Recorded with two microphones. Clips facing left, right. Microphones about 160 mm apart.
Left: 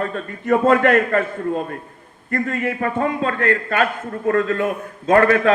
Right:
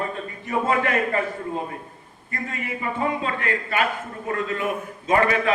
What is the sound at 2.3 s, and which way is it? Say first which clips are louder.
A man's voice: left 9 dB; 65° left (ahead or behind).